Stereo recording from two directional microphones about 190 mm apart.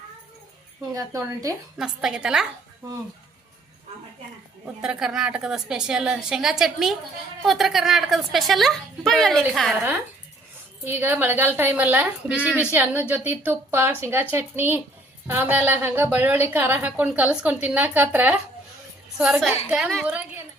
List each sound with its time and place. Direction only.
0.9 s a woman's voice: 15° right (ahead or behind)
1.8 s a woman's voice: 5° right (ahead or behind)
4.6 s a woman's voice: 5° right (ahead or behind)
10.8 s a woman's voice: 10° right (ahead or behind)